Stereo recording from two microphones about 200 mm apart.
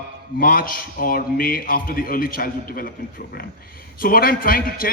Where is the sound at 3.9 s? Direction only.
45° left (ahead or behind).